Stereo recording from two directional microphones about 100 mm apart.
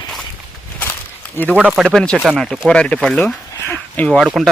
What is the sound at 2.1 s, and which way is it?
Speech, 10° right (ahead or behind).